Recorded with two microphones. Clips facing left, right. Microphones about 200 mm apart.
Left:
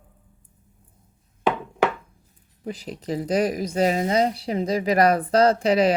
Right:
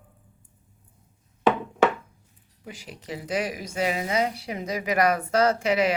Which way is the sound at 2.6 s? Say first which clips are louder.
Left 9 dB; 35° left (ahead or behind).